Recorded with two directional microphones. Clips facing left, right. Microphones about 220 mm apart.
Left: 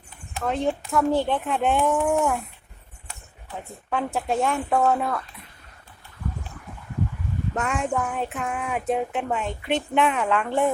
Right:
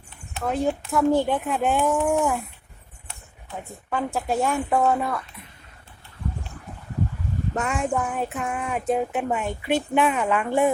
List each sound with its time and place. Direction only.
0.4 s speech: 5° right (ahead or behind)
3.8 s speech: centre (ahead or behind)
7.5 s speech: centre (ahead or behind)